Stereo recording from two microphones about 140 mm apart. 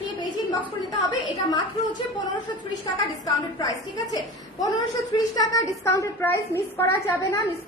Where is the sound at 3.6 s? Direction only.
25° left (ahead or behind).